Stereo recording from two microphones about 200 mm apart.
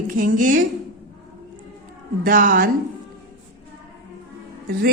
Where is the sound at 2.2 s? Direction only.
45° right (ahead or behind).